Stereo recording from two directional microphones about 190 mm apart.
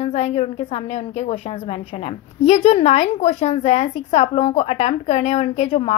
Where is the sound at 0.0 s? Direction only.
35° left (ahead or behind).